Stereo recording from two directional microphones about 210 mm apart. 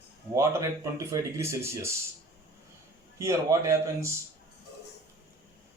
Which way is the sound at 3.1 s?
15° right (ahead or behind).